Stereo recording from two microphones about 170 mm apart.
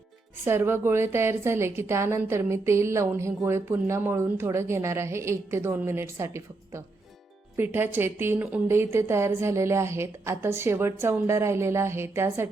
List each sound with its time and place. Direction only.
0.4 s a woman's voice: 15° right (ahead or behind)